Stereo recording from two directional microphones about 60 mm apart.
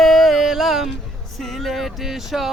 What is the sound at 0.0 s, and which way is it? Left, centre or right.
Music, centre.